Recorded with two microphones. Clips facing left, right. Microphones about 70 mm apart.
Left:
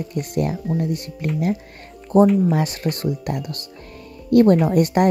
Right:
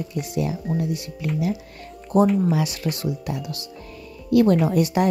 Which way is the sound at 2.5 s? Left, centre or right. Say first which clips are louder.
Left 2 dB; left.